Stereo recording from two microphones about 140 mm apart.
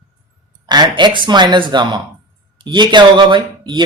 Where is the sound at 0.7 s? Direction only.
30° right (ahead or behind).